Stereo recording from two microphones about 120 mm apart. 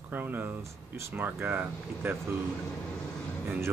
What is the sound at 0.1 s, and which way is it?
Speech, 15° right (ahead or behind).